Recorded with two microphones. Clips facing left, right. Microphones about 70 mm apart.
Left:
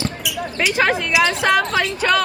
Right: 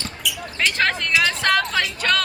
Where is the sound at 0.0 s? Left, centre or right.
Centre.